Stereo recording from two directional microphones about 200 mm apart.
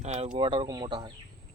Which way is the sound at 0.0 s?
35° right (ahead or behind).